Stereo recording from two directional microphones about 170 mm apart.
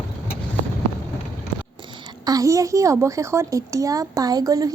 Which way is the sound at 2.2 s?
20° right (ahead or behind).